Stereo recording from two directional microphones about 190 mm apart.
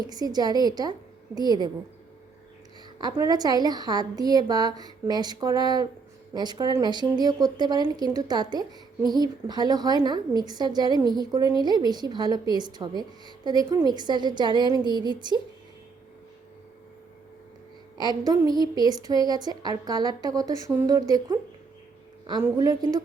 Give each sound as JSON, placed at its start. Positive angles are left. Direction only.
{"t": 0.1, "sound": "a woman's voice", "side_deg": -20}
{"t": 3.0, "sound": "a woman's voice", "side_deg": -20}
{"t": 18.3, "sound": "a woman's voice", "side_deg": -20}
{"t": 22.4, "sound": "a woman's voice", "side_deg": -15}